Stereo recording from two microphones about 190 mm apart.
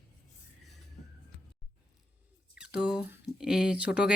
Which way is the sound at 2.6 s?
5° right (ahead or behind).